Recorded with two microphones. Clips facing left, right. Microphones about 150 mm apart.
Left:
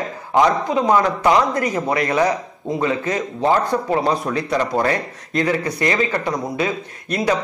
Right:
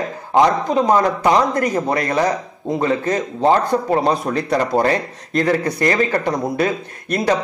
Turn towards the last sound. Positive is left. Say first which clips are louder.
# right 2 dB
turn(degrees=-45)  # may be behind; listen again after turning